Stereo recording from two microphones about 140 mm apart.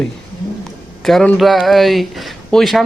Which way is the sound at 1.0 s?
Centre (ahead or behind).